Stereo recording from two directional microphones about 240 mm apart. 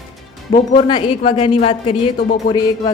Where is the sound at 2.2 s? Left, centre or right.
Left.